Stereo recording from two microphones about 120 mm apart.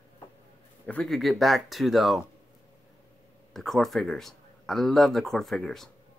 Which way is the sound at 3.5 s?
Centre (ahead or behind).